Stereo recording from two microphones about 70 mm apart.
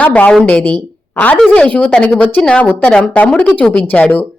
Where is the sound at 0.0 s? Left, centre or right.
Centre.